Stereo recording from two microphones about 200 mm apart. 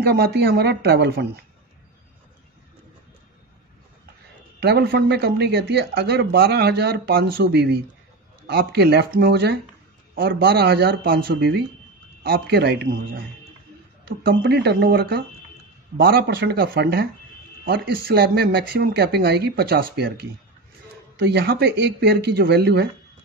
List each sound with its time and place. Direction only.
0.0 s speech: 55° right (ahead or behind)
4.6 s speech: 55° right (ahead or behind)
14.0 s speech: 55° right (ahead or behind)